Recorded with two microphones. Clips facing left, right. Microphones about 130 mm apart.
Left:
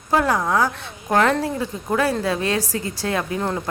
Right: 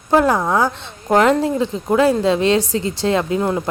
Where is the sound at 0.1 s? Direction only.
20° right (ahead or behind).